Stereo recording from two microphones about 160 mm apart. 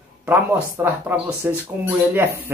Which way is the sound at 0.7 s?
15° right (ahead or behind).